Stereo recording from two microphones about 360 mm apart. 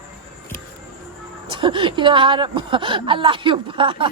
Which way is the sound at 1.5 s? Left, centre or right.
Centre.